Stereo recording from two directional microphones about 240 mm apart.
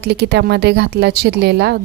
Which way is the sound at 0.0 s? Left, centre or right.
Right.